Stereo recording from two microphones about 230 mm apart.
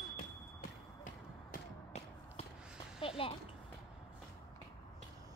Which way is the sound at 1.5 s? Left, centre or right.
Left.